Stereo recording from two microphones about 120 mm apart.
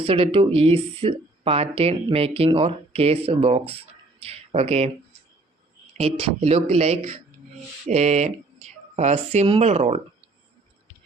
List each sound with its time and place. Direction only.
0.0 s speech: 50° right (ahead or behind)
6.0 s speech: 55° right (ahead or behind)